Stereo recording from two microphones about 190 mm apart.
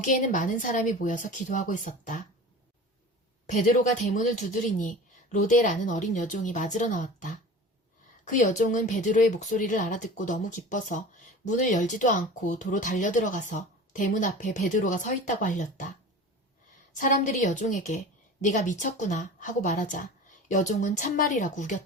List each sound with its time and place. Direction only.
0.0 s speech: 45° left (ahead or behind)
3.5 s speech: 40° left (ahead or behind)
8.3 s speech: 40° left (ahead or behind)
17.0 s speech: 40° left (ahead or behind)